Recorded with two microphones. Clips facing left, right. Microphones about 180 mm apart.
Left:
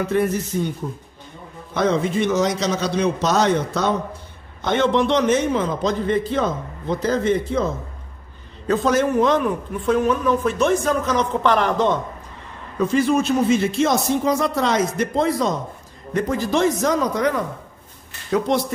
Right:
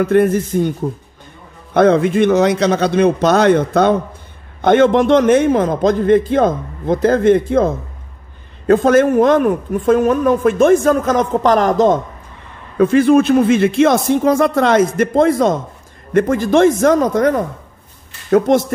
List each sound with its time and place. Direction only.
0.0 s speech: 55° right (ahead or behind)
12.7 s speech: 55° right (ahead or behind)